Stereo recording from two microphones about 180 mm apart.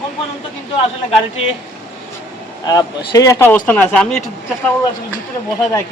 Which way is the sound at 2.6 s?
20° left (ahead or behind).